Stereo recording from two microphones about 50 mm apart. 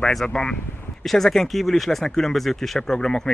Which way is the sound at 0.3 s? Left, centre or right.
Centre.